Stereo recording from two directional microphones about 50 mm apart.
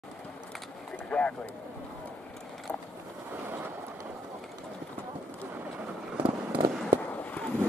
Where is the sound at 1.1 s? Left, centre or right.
Left.